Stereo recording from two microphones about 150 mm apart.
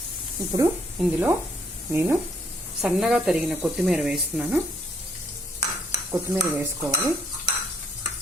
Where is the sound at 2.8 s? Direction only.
5° right (ahead or behind).